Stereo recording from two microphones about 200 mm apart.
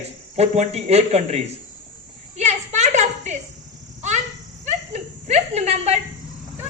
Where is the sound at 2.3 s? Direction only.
35° right (ahead or behind).